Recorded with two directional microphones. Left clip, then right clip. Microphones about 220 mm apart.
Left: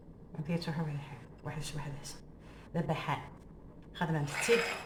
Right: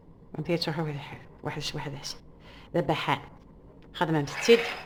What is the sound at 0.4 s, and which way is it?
A woman's voice, 50° right (ahead or behind).